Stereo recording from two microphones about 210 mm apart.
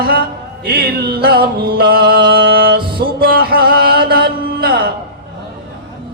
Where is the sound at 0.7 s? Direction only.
45° right (ahead or behind).